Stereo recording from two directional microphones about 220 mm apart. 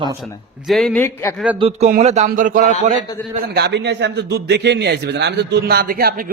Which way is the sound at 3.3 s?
45° right (ahead or behind).